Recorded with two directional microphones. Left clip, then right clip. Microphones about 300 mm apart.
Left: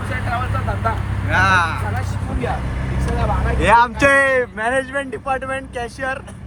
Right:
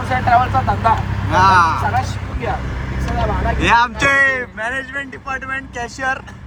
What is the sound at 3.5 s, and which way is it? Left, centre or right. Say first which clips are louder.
Speech: left 1 dB; centre.